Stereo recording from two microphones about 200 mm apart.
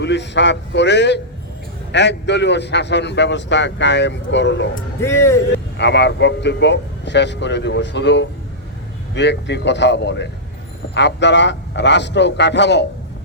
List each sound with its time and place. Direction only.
0.0 s a man's voice: 60° left (ahead or behind)
4.9 s speech: 15° left (ahead or behind)
5.7 s a man's voice: 60° left (ahead or behind)